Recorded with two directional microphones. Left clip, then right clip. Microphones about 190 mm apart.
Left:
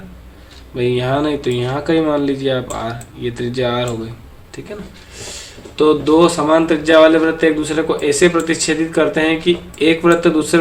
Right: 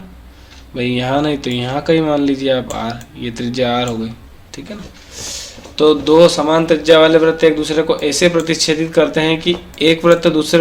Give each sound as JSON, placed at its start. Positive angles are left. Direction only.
{"t": 0.8, "sound": "speech", "side_deg": -35}
{"t": 5.1, "sound": "speech", "side_deg": -25}